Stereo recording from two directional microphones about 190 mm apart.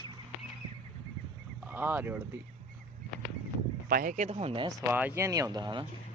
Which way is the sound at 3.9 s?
45° right (ahead or behind).